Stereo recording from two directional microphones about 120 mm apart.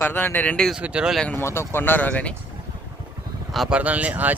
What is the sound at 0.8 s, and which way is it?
Speech, 10° right (ahead or behind).